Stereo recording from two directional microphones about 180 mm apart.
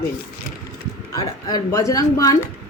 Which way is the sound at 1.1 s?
20° left (ahead or behind).